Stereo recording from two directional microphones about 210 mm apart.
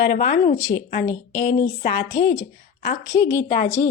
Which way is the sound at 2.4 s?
40° left (ahead or behind).